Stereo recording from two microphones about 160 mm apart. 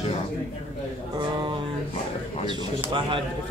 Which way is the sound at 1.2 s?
30° right (ahead or behind).